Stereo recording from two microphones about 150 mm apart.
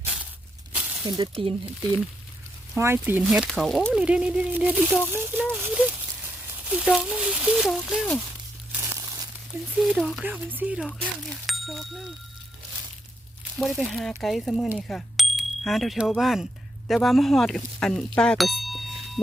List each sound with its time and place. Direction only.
0.7 s a sound: 10° right (ahead or behind)
1.0 s speech: 30° right (ahead or behind)
2.7 s speech: 15° right (ahead or behind)
8.7 s crumpling: 20° right (ahead or behind)
9.7 s speech: 5° right (ahead or behind)
10.2 s speech: 10° right (ahead or behind)
10.8 s speech: 5° left (ahead or behind)
13.6 s speech: centre (ahead or behind)